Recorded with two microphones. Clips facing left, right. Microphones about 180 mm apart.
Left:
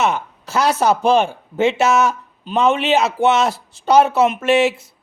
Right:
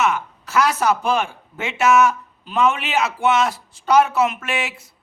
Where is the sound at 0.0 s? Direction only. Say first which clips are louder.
Left 2 dB; 30° left (ahead or behind).